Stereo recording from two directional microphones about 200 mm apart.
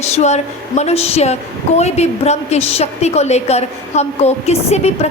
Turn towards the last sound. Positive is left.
turn(degrees=35)  # may be behind; listen again after turning